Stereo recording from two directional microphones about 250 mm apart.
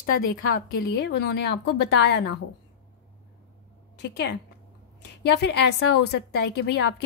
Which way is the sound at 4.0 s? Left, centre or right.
Left.